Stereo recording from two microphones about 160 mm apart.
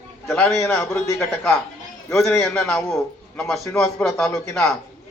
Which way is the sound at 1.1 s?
5° left (ahead or behind).